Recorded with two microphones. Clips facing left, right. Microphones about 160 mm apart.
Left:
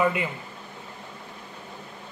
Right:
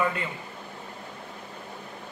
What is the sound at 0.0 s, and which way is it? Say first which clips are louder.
Speech: left 4 dB; 10° left (ahead or behind).